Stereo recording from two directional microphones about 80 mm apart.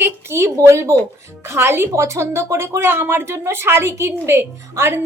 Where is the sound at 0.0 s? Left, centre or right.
Right.